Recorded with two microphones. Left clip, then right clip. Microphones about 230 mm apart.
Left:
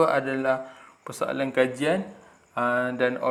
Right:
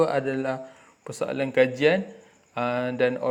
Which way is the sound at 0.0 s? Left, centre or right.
Right.